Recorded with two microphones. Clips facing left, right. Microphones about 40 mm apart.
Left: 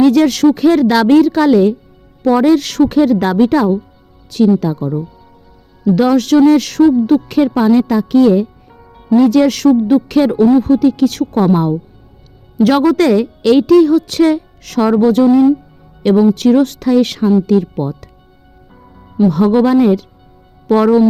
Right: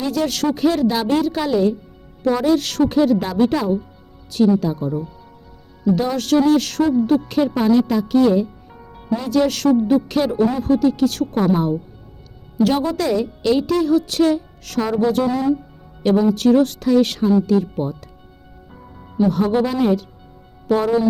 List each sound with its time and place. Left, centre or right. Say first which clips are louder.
0.0 s a woman's voice: left 11 dB; left
6.0 s a woman's voice: left 9 dB; left
8.7 s music: even; centre
9.1 s a woman's voice: left 9 dB; left
12.6 s a woman's voice: left 9 dB; left
18.7 s music: even; centre
19.3 s a woman's voice: left 10 dB; left